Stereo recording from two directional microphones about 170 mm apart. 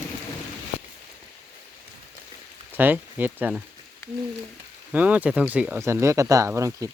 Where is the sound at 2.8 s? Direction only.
10° right (ahead or behind).